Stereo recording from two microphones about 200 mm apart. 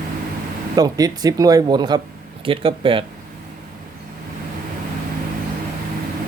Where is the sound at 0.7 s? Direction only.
20° right (ahead or behind).